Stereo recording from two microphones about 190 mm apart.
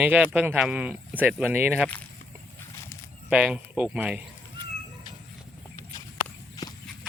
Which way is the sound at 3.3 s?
5° right (ahead or behind).